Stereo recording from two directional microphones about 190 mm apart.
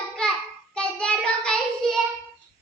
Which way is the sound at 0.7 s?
5° left (ahead or behind).